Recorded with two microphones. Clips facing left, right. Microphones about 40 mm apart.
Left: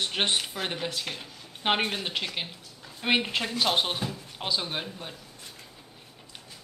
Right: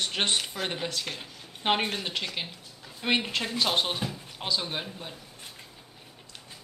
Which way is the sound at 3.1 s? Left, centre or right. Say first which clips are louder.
Left 1 dB; centre.